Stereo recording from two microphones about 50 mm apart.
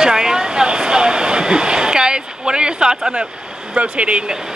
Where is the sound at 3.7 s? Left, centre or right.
Right.